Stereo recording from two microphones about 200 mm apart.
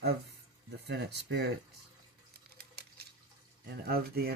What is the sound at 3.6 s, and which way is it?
Speech, 50° right (ahead or behind).